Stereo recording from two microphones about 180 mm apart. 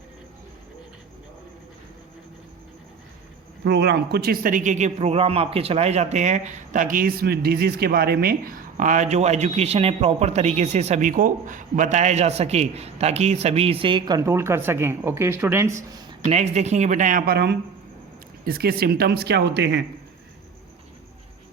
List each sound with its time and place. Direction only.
3.6 s a man's voice: 65° right (ahead or behind); by 14.2 s 25° right (ahead or behind)
14.2 s speech: 15° right (ahead or behind)
16.3 s speech: 40° right (ahead or behind); by 19.8 s 70° right (ahead or behind)